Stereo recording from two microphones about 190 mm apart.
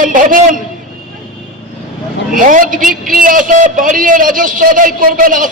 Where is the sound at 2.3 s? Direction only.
45° right (ahead or behind).